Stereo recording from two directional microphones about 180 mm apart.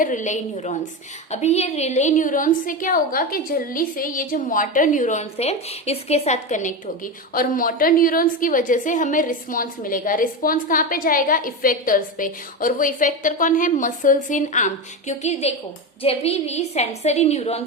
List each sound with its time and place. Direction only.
0.0 s a woman's voice: 45° left (ahead or behind)